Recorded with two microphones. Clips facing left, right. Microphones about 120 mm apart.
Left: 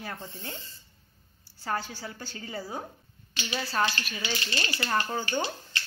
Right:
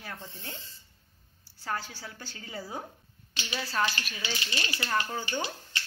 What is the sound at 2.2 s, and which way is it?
Speech, 5° right (ahead or behind).